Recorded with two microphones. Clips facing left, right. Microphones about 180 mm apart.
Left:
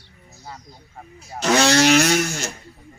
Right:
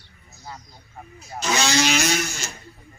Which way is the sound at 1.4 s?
70° left (ahead or behind).